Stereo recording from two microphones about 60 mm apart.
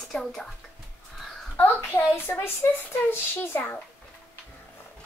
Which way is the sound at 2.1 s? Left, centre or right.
Left.